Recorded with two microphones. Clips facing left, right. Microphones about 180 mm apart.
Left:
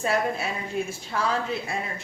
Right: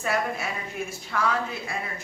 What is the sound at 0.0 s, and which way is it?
A woman's voice, 30° left (ahead or behind).